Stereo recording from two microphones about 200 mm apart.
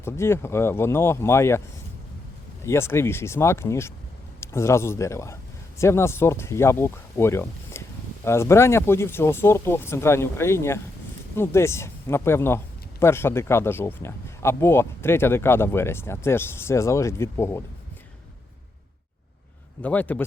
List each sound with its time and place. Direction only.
0.0 s speech: 10° left (ahead or behind)
2.6 s a man's voice: 15° left (ahead or behind)
19.8 s speech: 10° left (ahead or behind)